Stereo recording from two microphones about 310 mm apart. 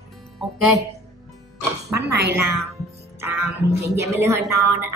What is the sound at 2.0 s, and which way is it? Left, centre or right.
Speech, right.